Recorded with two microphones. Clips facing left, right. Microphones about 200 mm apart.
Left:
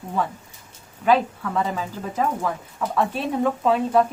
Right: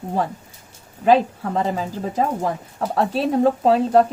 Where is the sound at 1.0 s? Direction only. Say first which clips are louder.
Right 3 dB; 40° right (ahead or behind).